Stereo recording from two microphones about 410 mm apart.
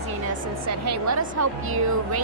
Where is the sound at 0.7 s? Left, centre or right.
Right.